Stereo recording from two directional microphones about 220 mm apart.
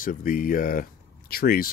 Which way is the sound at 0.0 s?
40° left (ahead or behind).